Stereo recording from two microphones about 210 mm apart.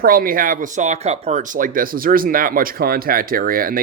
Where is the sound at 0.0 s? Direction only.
45° right (ahead or behind).